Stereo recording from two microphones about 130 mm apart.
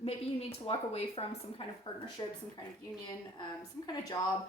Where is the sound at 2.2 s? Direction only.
30° left (ahead or behind).